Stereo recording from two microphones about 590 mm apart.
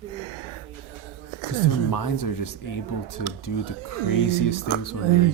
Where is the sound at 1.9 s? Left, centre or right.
Left.